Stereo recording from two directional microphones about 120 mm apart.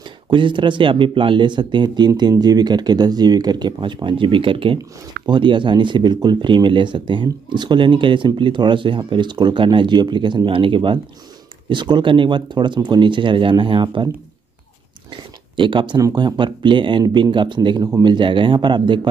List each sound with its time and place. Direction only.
0.3 s speech: 45° right (ahead or behind)
15.5 s speech: 45° right (ahead or behind)